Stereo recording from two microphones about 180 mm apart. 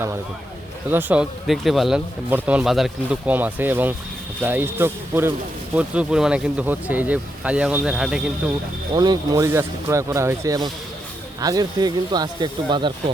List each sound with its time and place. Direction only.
0.9 s speech: 10° right (ahead or behind)
8.9 s speech: 25° right (ahead or behind)